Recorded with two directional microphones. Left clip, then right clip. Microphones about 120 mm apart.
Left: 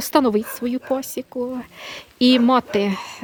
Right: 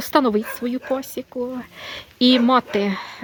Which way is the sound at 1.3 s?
15° left (ahead or behind).